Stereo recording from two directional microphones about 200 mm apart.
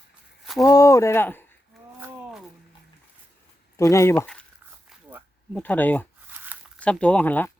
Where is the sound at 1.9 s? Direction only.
10° right (ahead or behind).